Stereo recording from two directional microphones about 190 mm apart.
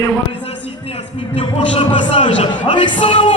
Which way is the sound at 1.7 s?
25° left (ahead or behind).